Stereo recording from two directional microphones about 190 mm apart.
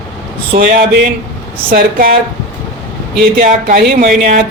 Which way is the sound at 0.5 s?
45° right (ahead or behind).